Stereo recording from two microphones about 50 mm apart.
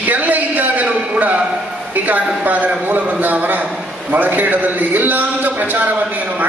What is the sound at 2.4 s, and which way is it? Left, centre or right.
A man's voice, right.